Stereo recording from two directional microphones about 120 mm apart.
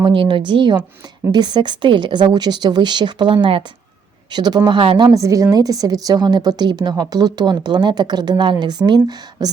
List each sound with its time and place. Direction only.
0.0 s a woman's voice: 45° right (ahead or behind)
5.1 s a woman's voice: 30° right (ahead or behind)